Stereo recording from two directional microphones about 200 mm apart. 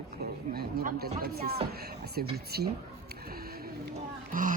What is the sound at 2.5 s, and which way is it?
Speech, 50° right (ahead or behind).